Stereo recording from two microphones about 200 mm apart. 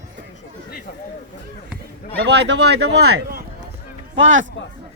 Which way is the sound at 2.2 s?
60° right (ahead or behind).